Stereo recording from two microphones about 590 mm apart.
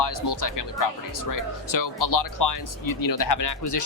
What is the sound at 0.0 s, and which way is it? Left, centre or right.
Speech, left.